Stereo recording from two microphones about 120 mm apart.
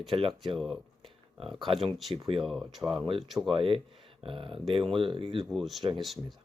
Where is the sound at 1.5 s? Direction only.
45° right (ahead or behind).